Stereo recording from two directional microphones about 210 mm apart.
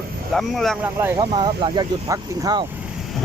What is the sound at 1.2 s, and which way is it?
Speech, 20° right (ahead or behind).